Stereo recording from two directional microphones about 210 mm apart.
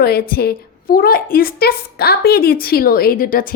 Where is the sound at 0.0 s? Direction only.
45° left (ahead or behind).